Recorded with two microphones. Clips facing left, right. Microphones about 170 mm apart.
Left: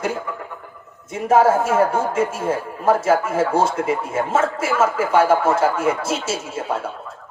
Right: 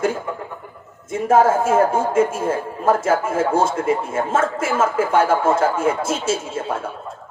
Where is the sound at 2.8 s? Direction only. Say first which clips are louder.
Left 1 dB; 50° right (ahead or behind).